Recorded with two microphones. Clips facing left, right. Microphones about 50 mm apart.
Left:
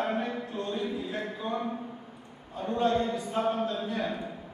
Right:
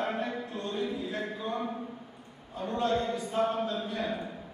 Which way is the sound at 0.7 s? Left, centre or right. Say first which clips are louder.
Right 1 dB; centre.